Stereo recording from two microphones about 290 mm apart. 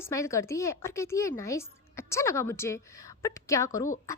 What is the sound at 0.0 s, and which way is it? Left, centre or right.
A woman's voice, centre.